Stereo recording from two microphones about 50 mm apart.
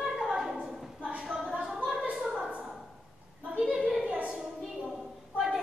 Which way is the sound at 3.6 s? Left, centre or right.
Centre.